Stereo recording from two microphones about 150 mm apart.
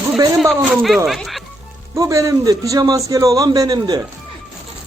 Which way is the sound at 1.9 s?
20° right (ahead or behind).